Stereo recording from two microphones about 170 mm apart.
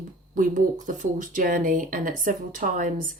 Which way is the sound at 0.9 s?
50° right (ahead or behind).